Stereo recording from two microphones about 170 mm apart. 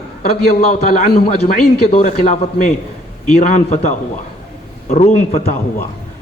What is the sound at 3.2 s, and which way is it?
A man's voice, 45° left (ahead or behind).